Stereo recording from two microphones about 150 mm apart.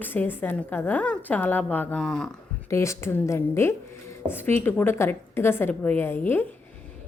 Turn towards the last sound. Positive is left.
turn(degrees=15)  # may be behind; listen again after turning